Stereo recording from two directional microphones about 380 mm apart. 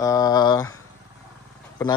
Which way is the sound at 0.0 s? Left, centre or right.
Centre.